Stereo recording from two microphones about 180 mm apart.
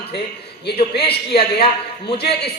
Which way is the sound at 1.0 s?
30° left (ahead or behind).